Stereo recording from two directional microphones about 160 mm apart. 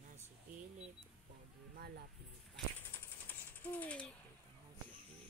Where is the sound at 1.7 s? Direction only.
75° right (ahead or behind).